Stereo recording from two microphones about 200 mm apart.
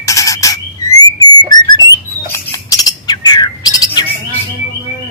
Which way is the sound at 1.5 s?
20° left (ahead or behind).